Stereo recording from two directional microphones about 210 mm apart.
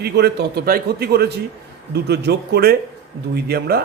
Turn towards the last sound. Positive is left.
turn(degrees=-50)  # may be behind; listen again after turning